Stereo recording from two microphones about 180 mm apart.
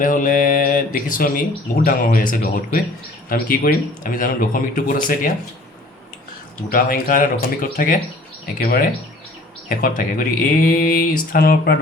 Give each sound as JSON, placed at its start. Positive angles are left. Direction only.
{"t": 0.0, "sound": "mantra", "side_deg": 50}
{"t": 1.8, "sound": "speech", "side_deg": 50}
{"t": 6.7, "sound": "speech", "side_deg": 55}